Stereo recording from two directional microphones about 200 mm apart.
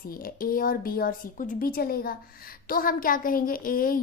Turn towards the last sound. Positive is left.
turn(degrees=45)  # may be behind; listen again after turning